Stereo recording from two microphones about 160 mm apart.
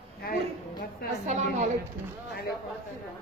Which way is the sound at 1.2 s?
45° right (ahead or behind).